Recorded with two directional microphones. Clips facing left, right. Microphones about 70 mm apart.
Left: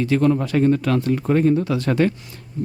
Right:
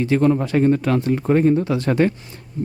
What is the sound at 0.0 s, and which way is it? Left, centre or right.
Speech, right.